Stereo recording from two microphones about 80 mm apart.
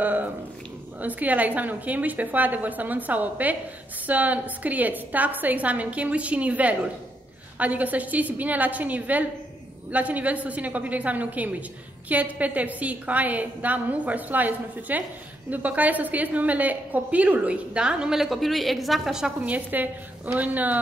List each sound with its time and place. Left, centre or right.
0.0 s a woman's voice: right; by 19.3 s centre
19.4 s a woman's voice: centre